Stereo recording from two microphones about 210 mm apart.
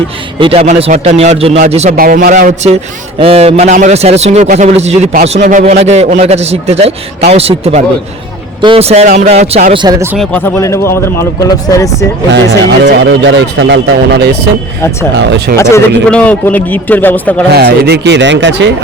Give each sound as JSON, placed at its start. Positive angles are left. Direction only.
{"t": 0.3, "sound": "a man's voice", "side_deg": -25}
{"t": 2.0, "sound": "a man's voice", "side_deg": -45}
{"t": 9.7, "sound": "a man's voice", "side_deg": -20}
{"t": 10.2, "sound": "a man's voice", "side_deg": 10}
{"t": 12.3, "sound": "speech", "side_deg": -60}
{"t": 15.5, "sound": "a man's voice", "side_deg": 10}
{"t": 17.5, "sound": "speech", "side_deg": -50}